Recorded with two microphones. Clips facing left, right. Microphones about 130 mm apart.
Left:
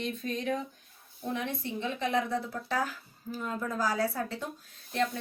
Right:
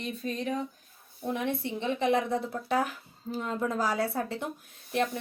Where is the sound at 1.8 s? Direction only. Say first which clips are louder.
Right 4 dB; 20° right (ahead or behind).